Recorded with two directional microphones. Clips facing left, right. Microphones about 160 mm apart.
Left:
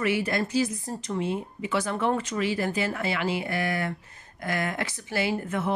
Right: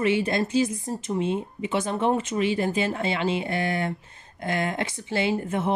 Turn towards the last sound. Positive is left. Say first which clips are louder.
# right 2 dB
turn(degrees=-25)  # may be behind; listen again after turning